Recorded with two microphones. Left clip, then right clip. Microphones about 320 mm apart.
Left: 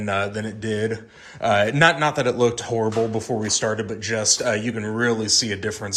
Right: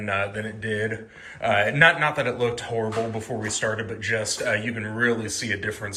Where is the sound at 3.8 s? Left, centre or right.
Centre.